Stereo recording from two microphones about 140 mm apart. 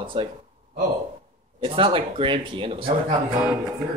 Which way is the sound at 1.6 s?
40° right (ahead or behind).